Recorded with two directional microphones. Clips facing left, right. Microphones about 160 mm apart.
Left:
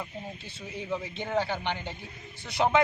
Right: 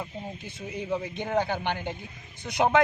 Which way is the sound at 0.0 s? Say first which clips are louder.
Right 2 dB; 15° right (ahead or behind).